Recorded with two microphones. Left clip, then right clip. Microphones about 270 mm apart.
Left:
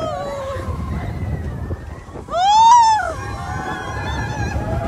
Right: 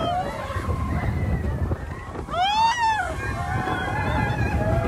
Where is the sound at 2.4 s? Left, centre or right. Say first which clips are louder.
Left 10 dB; centre.